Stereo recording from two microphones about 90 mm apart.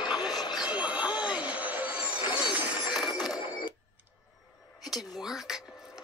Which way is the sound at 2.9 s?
5° right (ahead or behind).